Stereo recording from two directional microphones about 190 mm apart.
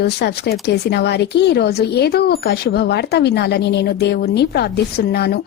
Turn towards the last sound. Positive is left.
turn(degrees=55)  # may be behind; listen again after turning